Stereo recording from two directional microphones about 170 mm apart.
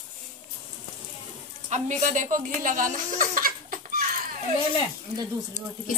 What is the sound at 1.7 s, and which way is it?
Speech, 45° right (ahead or behind).